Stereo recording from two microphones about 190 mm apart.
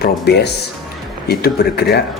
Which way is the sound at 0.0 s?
60° left (ahead or behind).